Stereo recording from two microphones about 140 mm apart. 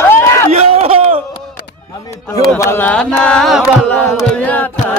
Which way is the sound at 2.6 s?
15° left (ahead or behind).